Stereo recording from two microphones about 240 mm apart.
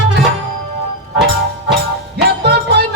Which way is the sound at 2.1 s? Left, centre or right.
Right.